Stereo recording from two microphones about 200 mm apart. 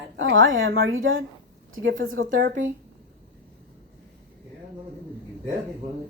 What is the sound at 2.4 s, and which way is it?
Speech, 40° right (ahead or behind).